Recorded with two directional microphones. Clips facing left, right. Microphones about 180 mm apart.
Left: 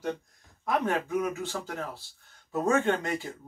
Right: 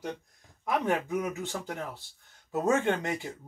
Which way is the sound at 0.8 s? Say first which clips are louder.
Left 1 dB; 15° right (ahead or behind).